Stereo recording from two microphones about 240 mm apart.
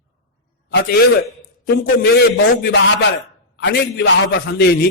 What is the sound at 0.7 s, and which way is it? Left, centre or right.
A man's voice, left.